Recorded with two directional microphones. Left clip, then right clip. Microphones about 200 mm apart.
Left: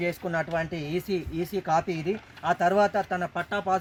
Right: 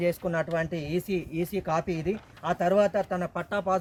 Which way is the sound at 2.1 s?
10° right (ahead or behind).